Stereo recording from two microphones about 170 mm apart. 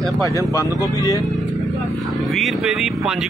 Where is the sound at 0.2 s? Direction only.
20° left (ahead or behind).